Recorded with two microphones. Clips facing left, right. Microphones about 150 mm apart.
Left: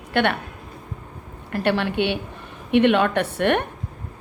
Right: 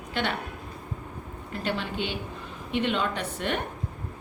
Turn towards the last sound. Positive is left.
turn(degrees=65)  # may be behind; listen again after turning